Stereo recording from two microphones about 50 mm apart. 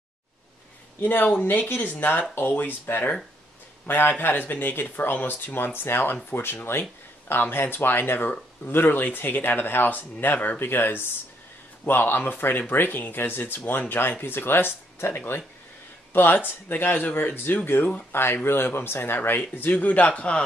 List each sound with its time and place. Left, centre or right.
1.0 s speech: left